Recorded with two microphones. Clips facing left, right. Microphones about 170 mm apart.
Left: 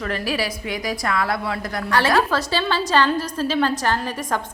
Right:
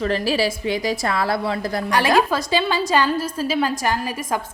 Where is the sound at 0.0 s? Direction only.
30° right (ahead or behind).